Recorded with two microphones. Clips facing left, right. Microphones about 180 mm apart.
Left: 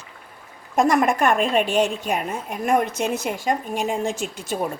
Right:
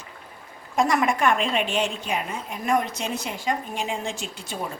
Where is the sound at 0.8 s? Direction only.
50° left (ahead or behind).